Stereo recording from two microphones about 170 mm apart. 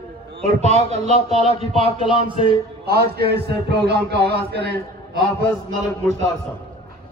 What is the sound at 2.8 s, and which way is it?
A man's voice, 70° right (ahead or behind).